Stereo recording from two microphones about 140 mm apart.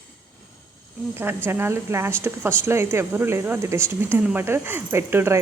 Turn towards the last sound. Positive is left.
turn(degrees=-20)  # may be behind; listen again after turning